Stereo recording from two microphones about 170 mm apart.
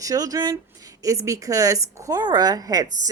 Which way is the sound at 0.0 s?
20° right (ahead or behind).